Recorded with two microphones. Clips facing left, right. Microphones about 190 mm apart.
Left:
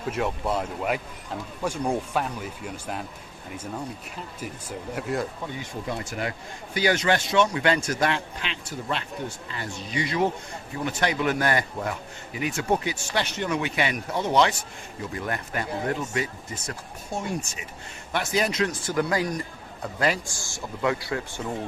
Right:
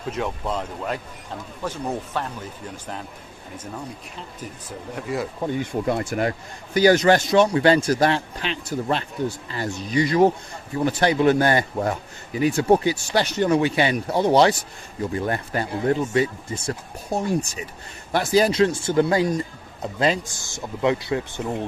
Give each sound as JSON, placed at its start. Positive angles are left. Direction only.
{"t": 0.0, "sound": "speech", "side_deg": 5}
{"t": 4.9, "sound": "speech", "side_deg": 0}
{"t": 5.5, "sound": "speech", "side_deg": -55}
{"t": 6.7, "sound": "a man's voice", "side_deg": -40}